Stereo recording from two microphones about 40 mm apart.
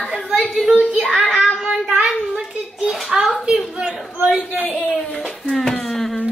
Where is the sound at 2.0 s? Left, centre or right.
Centre.